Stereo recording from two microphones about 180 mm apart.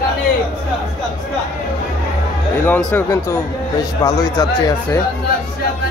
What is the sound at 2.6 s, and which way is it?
Speech, 10° left (ahead or behind).